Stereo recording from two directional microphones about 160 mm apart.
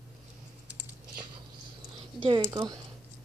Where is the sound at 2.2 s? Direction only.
30° right (ahead or behind).